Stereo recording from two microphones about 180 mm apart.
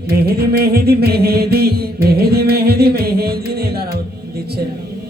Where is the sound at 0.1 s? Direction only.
60° right (ahead or behind).